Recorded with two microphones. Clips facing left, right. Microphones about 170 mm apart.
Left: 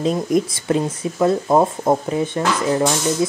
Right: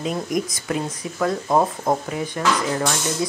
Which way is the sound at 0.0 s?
30° left (ahead or behind).